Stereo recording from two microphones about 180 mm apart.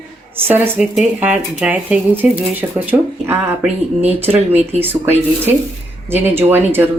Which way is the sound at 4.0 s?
35° right (ahead or behind).